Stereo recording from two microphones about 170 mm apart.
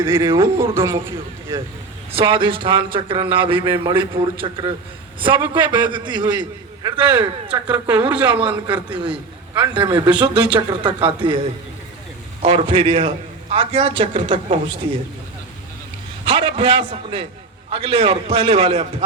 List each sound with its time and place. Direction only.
0.0 s a man's voice: 15° right (ahead or behind)
2.1 s a man's voice: 30° right (ahead or behind)
7.7 s a man's voice: 10° right (ahead or behind)
8.4 s a man's voice: 25° right (ahead or behind)
16.2 s a man's voice: 30° right (ahead or behind)